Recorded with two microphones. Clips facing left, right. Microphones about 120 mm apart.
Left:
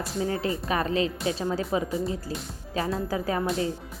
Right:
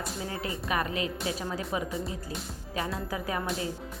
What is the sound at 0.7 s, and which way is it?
A woman's voice, 30° left (ahead or behind).